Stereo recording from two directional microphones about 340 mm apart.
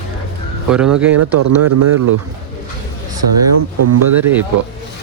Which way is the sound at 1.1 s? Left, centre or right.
Right.